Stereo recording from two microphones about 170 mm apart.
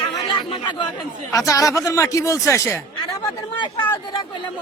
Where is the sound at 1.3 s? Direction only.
20° left (ahead or behind).